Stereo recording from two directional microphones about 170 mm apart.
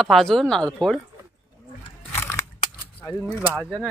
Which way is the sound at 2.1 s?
15° left (ahead or behind).